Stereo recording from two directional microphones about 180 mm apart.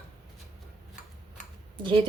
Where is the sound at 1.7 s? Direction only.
30° right (ahead or behind).